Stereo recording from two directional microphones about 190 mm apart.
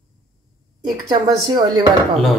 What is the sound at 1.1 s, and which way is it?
Speech, 20° right (ahead or behind).